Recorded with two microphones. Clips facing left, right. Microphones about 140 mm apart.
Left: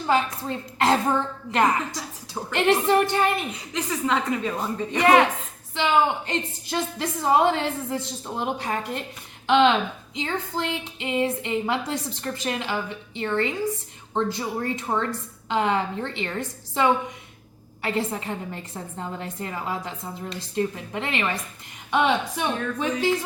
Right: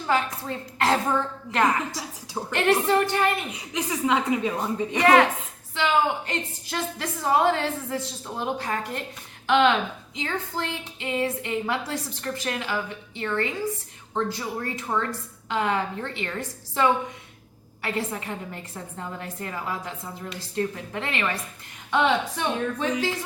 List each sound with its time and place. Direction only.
0.1 s a woman's voice: 20° left (ahead or behind)
3.5 s a woman's voice: 10° right (ahead or behind)
4.9 s a woman's voice: 20° left (ahead or behind)